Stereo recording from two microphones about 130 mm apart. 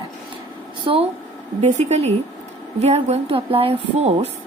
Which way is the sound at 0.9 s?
40° right (ahead or behind).